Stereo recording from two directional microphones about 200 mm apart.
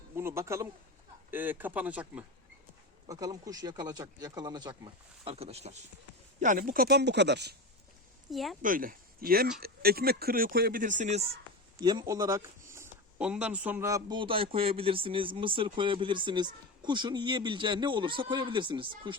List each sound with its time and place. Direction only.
0.2 s speech: 15° right (ahead or behind)
3.1 s speech: 15° right (ahead or behind); by 7.5 s 60° right (ahead or behind)
8.3 s speech: centre (ahead or behind)
8.6 s speech: 45° right (ahead or behind)
11.8 s speech: 20° right (ahead or behind)